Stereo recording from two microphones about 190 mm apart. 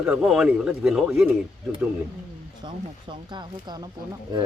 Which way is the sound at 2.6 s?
25° right (ahead or behind).